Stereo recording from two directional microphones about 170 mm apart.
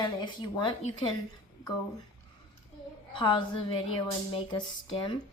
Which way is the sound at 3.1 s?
30° left (ahead or behind).